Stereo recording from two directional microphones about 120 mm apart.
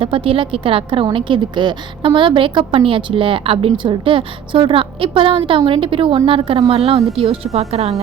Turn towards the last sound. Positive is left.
turn(degrees=-60)  # may be behind; listen again after turning